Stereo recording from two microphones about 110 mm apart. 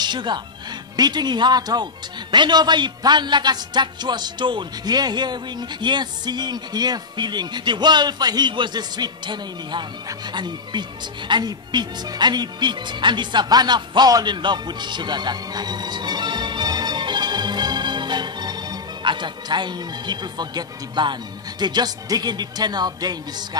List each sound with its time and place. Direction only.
0.0 s a man's voice: 45° right (ahead or behind)